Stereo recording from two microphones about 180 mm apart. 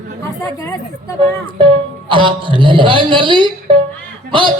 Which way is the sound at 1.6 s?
25° right (ahead or behind).